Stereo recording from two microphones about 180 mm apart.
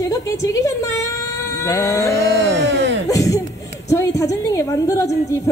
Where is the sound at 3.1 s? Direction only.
20° left (ahead or behind).